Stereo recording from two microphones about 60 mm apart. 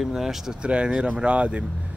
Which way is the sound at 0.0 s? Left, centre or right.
Centre.